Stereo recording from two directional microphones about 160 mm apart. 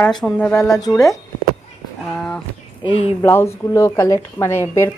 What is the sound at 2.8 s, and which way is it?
Speech, 40° left (ahead or behind).